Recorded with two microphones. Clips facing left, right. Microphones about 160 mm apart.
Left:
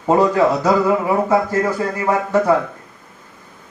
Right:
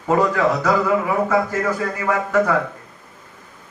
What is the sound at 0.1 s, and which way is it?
Speech, 30° left (ahead or behind).